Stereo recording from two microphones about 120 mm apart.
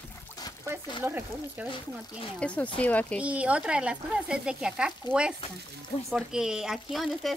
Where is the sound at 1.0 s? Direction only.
15° right (ahead or behind).